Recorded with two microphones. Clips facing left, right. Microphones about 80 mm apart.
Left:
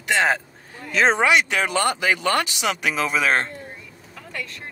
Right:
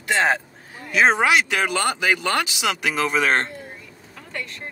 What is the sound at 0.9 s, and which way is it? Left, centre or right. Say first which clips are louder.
Speech: even; centre.